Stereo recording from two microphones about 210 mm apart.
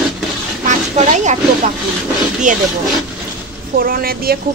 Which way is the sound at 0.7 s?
35° right (ahead or behind).